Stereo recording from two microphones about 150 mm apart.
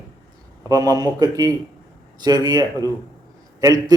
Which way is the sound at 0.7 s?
25° right (ahead or behind).